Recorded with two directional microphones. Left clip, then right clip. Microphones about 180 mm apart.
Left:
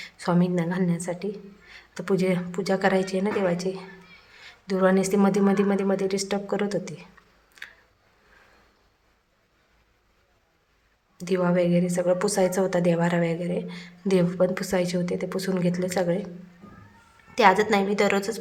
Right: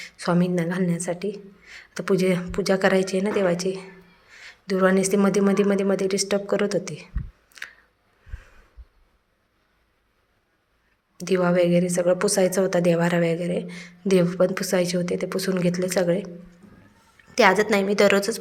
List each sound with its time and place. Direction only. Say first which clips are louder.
0.0 s a woman's voice: right 2 dB; 10° right (ahead or behind)
7.6 s a sound: right 4 dB; 15° right (ahead or behind)
11.2 s a woman's voice: right 3 dB; 15° right (ahead or behind)
17.3 s a woman's voice: right 1 dB; 15° right (ahead or behind)